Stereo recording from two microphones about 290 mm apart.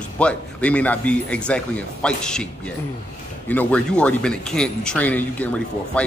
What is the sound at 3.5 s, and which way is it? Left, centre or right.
Speech, centre.